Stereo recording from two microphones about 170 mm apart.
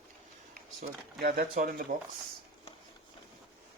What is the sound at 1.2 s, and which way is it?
Speech, 65° right (ahead or behind).